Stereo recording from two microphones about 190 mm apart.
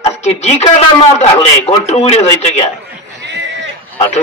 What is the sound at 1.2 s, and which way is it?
A man's voice, 35° left (ahead or behind).